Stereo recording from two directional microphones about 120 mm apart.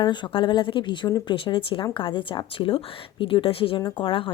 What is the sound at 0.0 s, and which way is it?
Speech, 40° left (ahead or behind).